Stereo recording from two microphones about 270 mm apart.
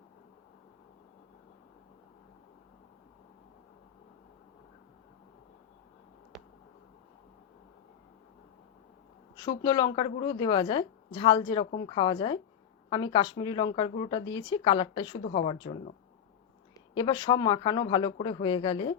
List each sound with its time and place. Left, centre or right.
6.3 s a sound: centre
9.6 s speech: centre
16.9 s speech: centre